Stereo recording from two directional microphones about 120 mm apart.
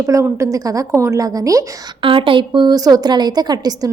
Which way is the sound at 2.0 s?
45° right (ahead or behind).